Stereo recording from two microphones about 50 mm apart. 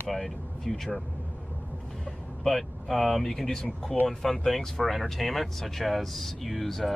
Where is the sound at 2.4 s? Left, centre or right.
Centre.